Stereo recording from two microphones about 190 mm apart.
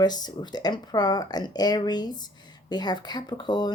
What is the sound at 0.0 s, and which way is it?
Speech, 20° left (ahead or behind).